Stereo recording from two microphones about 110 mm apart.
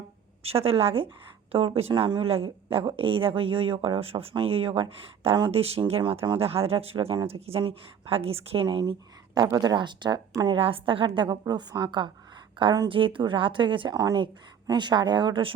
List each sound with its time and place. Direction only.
0.4 s speech: 60° right (ahead or behind)
1.9 s speech: 45° right (ahead or behind); by 5.8 s 65° right (ahead or behind)
6.0 s speech: 50° right (ahead or behind)
8.6 s speech: 45° right (ahead or behind)
10.6 s a woman's voice: 55° right (ahead or behind)
12.9 s a woman's voice: 50° right (ahead or behind)